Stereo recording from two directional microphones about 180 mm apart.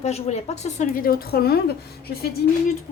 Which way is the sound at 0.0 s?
35° left (ahead or behind).